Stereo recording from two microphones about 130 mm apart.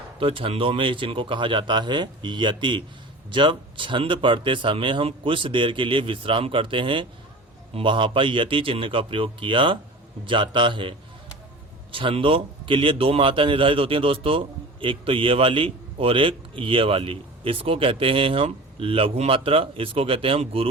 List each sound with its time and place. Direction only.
0.2 s a man's voice: 45° right (ahead or behind)